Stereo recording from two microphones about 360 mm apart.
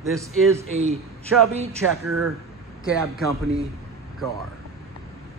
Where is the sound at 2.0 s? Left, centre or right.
Right.